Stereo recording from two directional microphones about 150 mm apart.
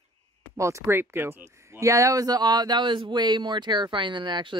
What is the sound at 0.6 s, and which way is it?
Speech, 20° right (ahead or behind).